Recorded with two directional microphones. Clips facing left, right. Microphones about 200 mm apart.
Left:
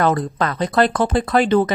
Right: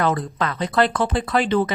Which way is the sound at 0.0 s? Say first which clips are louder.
Left 3 dB; 45° left (ahead or behind).